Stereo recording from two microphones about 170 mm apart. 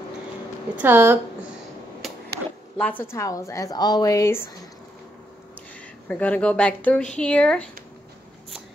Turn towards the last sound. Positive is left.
turn(degrees=5)  # may be behind; listen again after turning